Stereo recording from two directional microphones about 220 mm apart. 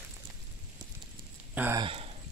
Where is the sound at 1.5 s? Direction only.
10° right (ahead or behind).